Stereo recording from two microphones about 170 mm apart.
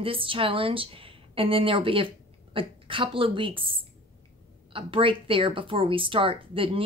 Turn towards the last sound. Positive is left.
turn(degrees=-30)  # may be behind; listen again after turning